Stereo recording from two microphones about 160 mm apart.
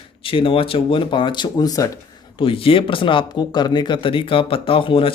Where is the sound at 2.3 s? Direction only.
35° left (ahead or behind).